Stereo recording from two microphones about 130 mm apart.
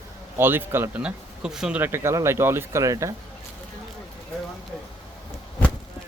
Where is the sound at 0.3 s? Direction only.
15° right (ahead or behind).